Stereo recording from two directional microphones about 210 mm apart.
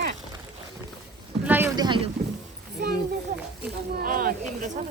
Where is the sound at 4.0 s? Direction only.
40° right (ahead or behind).